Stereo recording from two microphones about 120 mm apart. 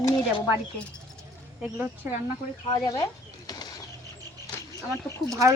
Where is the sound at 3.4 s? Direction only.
30° left (ahead or behind).